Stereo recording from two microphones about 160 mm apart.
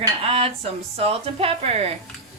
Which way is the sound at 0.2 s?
40° right (ahead or behind).